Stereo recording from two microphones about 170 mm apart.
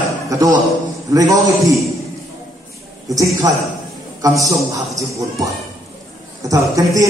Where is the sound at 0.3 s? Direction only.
20° right (ahead or behind).